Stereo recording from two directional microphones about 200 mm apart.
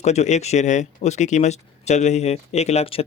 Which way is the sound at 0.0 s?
35° left (ahead or behind).